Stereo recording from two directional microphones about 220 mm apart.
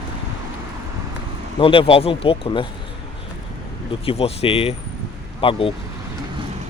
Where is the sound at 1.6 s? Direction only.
25° left (ahead or behind).